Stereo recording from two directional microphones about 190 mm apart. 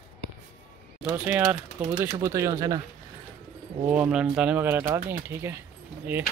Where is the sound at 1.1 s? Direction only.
5° right (ahead or behind).